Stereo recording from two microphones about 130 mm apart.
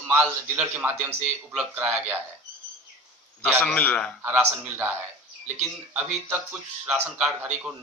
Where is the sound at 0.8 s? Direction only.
15° right (ahead or behind).